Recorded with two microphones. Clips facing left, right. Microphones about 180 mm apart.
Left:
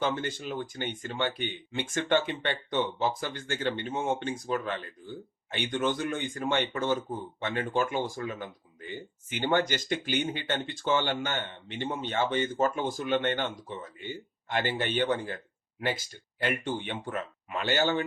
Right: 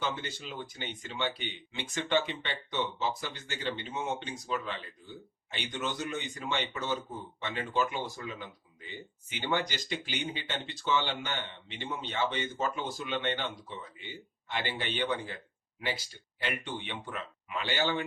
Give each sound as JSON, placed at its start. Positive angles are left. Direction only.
{"t": 0.0, "sound": "speech", "side_deg": 45}